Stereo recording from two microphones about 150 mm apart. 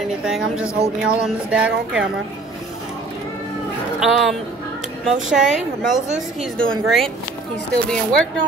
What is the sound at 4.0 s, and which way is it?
A woman's voice, centre (ahead or behind).